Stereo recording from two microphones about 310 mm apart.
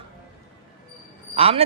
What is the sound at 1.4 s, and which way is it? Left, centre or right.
Mantra, centre.